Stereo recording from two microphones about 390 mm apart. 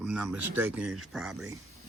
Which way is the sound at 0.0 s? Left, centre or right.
Centre.